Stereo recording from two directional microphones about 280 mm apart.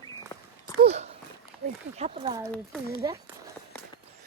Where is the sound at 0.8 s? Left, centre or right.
Right.